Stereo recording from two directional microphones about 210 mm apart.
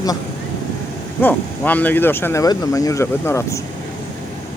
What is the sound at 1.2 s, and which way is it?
Speech, 10° left (ahead or behind).